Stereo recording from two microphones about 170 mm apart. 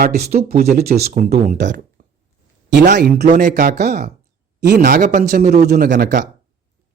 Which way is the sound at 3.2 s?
45° right (ahead or behind).